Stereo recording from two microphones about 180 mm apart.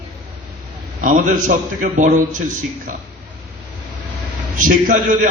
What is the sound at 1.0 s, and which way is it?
A man's voice, 45° right (ahead or behind).